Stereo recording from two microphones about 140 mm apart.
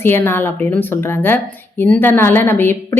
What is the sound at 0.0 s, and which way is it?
A woman's voice, 15° left (ahead or behind).